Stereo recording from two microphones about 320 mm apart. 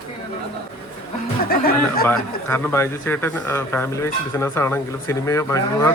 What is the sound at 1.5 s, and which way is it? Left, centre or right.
Speech, left.